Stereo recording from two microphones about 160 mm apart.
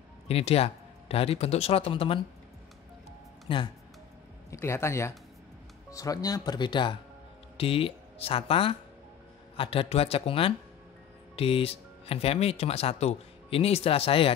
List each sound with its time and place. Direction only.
0.3 s speech: 40° left (ahead or behind)
3.4 s speech: 30° left (ahead or behind)
4.5 s speech: 15° left (ahead or behind); by 14.3 s 35° left (ahead or behind)